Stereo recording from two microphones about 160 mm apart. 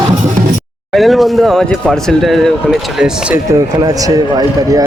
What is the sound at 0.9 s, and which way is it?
Speech, centre (ahead or behind).